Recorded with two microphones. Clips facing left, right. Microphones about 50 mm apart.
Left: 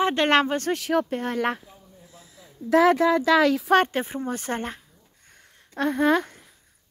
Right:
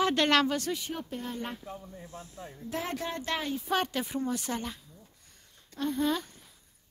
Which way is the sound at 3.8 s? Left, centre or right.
Left.